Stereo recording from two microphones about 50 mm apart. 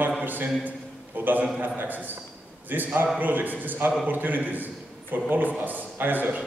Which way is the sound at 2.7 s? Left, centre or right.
Right.